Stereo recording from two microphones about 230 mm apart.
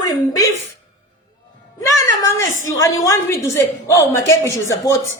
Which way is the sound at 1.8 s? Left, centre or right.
Centre.